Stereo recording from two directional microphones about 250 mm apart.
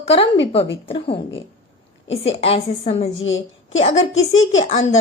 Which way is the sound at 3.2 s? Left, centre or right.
Left.